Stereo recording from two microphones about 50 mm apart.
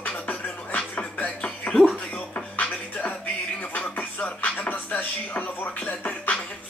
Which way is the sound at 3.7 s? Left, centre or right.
Left.